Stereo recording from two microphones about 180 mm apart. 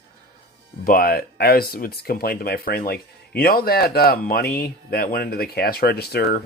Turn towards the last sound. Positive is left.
turn(degrees=60)  # may be behind; listen again after turning